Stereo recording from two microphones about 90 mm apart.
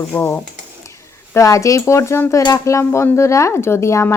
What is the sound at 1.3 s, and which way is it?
Speech, 35° left (ahead or behind).